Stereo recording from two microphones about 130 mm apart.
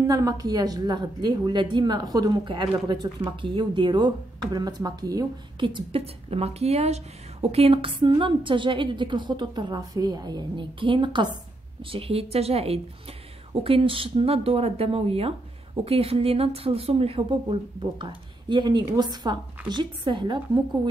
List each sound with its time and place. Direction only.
0.0 s a woman's voice: 30° right (ahead or behind)